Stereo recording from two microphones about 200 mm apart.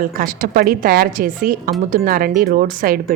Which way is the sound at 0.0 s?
45° right (ahead or behind).